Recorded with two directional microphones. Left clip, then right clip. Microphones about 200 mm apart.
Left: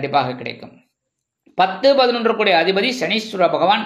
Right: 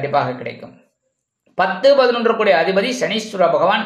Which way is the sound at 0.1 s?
35° left (ahead or behind).